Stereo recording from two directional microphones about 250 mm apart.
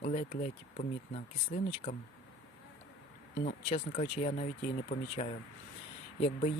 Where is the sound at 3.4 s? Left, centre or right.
Left.